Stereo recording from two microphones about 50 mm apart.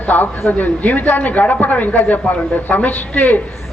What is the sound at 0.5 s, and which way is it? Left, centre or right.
A woman's voice, left.